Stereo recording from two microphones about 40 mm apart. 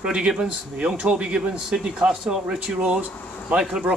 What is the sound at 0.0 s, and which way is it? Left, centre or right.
A man's voice, centre.